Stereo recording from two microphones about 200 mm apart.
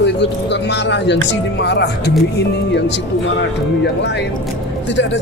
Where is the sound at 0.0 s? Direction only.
60° left (ahead or behind).